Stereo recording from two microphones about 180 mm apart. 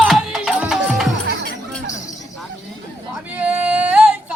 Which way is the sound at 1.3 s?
60° right (ahead or behind).